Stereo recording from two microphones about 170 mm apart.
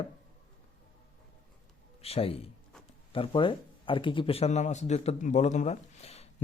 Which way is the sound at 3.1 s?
30° left (ahead or behind).